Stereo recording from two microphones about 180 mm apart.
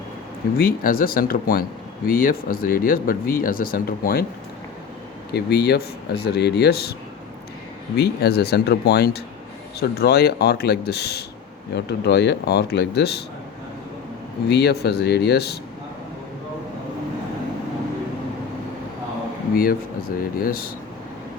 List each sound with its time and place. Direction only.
0.6 s speech: 55° left (ahead or behind)
5.3 s speech: 65° left (ahead or behind)
7.9 s speech: 60° left (ahead or behind)
14.5 s speech: 65° left (ahead or behind)
19.5 s speech: 55° left (ahead or behind)